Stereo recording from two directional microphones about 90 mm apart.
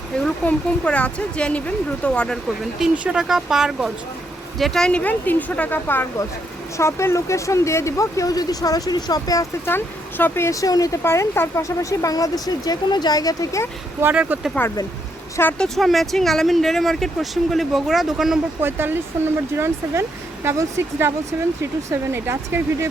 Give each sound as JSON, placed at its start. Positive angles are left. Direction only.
{"t": 0.4, "sound": "speech", "side_deg": 15}
{"t": 2.9, "sound": "speech", "side_deg": -10}
{"t": 9.6, "sound": "speech", "side_deg": 25}
{"t": 11.0, "sound": "speech", "side_deg": 30}
{"t": 14.0, "sound": "speech", "side_deg": -20}
{"t": 14.6, "sound": "speech", "side_deg": 20}
{"t": 15.5, "sound": "speech", "side_deg": 5}
{"t": 18.6, "sound": "speech", "side_deg": -25}